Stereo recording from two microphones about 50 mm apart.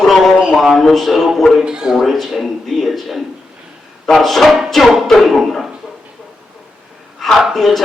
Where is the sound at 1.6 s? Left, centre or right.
Centre.